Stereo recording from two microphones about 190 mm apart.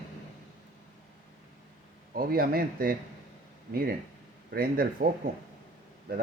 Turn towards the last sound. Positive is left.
turn(degrees=-50)  # may be behind; listen again after turning